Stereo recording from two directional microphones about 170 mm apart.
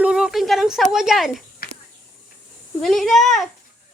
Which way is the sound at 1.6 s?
60° left (ahead or behind).